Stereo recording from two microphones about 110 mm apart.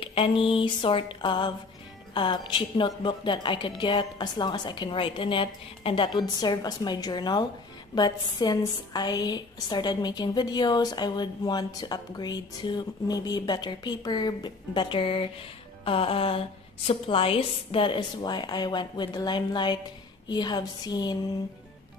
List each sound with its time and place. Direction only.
0.0 s a woman's voice: 55° left (ahead or behind); by 21.2 s 40° left (ahead or behind)